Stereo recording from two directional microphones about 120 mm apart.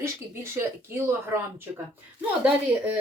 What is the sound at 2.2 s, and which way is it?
Speech, 10° right (ahead or behind).